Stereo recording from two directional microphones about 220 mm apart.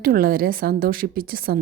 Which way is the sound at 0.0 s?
40° right (ahead or behind).